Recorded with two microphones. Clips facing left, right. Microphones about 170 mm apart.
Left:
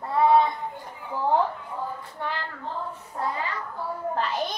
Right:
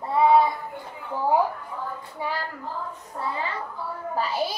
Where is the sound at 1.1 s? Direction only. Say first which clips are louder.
Right 1 dB; 10° right (ahead or behind).